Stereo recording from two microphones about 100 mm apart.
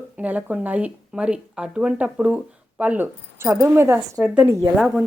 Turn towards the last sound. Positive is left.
turn(degrees=0)  # may be behind; listen again after turning